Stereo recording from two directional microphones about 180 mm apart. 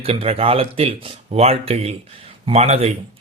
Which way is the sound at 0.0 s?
35° right (ahead or behind).